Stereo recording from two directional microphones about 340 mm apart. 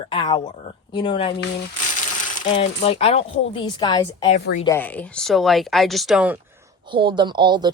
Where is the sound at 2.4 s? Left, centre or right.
Centre.